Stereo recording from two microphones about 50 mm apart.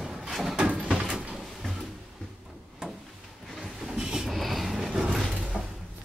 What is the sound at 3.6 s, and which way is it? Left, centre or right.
Train, centre.